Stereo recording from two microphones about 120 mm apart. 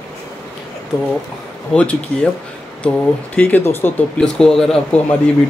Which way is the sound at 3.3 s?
15° left (ahead or behind).